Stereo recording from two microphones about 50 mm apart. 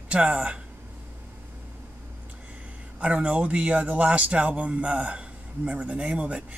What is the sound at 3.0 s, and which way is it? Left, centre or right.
Speech, centre.